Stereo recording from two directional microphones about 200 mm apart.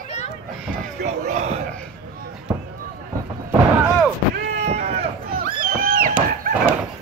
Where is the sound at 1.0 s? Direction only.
35° right (ahead or behind).